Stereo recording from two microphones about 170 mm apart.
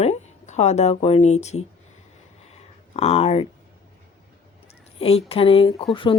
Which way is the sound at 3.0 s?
35° left (ahead or behind).